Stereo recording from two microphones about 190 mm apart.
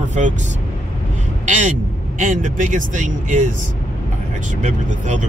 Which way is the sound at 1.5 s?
40° right (ahead or behind).